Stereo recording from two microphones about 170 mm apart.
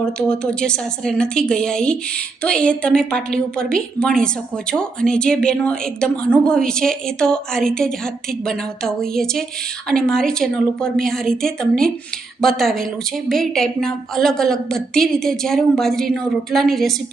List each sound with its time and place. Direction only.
0.0 s a woman's voice: 5° left (ahead or behind)